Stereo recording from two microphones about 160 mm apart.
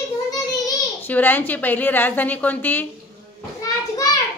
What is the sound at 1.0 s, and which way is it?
A woman's voice, 10° left (ahead or behind).